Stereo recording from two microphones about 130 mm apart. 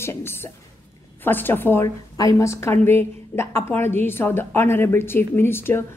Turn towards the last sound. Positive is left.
turn(degrees=15)  # may be behind; listen again after turning